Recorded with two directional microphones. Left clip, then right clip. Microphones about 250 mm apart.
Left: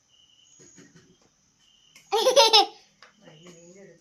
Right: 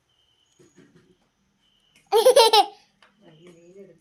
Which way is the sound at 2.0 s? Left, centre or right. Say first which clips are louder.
Right 4 dB; right.